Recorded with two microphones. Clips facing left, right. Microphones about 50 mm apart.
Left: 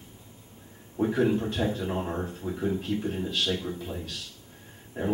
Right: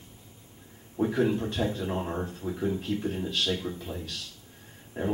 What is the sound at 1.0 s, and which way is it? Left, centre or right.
A man's voice, centre.